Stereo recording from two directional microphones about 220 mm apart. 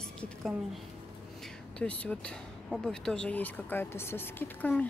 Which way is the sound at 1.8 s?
5° left (ahead or behind).